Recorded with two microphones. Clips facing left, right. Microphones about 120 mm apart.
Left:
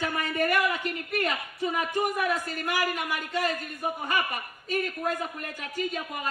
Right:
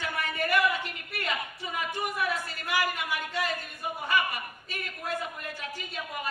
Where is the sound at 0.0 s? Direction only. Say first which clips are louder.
Left 4 dB; 45° left (ahead or behind).